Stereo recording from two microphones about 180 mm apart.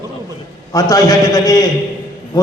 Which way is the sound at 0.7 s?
20° left (ahead or behind).